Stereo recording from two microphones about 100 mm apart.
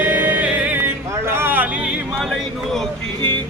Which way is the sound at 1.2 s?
20° right (ahead or behind).